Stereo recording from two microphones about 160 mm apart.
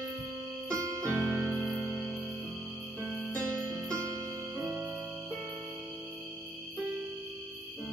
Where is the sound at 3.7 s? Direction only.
20° right (ahead or behind).